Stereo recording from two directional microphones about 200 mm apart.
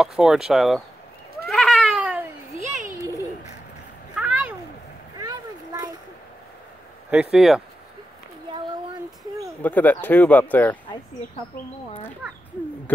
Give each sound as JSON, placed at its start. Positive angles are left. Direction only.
{"t": 0.0, "sound": "speech", "side_deg": 0}
{"t": 1.5, "sound": "cat", "side_deg": 0}
{"t": 4.1, "sound": "a sound", "side_deg": -5}
{"t": 5.2, "sound": "a sound", "side_deg": -20}
{"t": 7.3, "sound": "speech", "side_deg": 0}
{"t": 9.6, "sound": "speech", "side_deg": 10}